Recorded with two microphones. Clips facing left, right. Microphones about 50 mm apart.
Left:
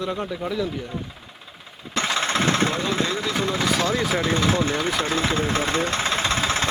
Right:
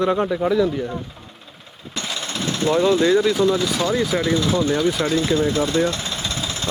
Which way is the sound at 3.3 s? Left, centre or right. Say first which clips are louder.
Right 4 dB; left.